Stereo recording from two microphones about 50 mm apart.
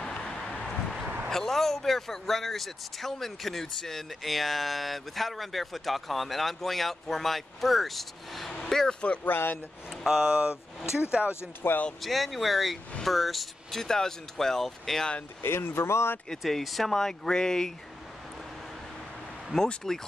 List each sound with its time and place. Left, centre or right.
0.0 s a sound: centre
1.3 s speech: centre
9.0 s speech: left
9.3 s speech: left
9.8 s speech: centre
11.2 s speech: left
12.0 s speech: centre
15.4 s speech: left
16.4 s speech: centre
19.8 s speech: centre